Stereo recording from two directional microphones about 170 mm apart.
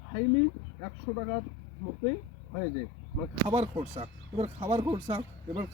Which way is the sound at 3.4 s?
30° right (ahead or behind).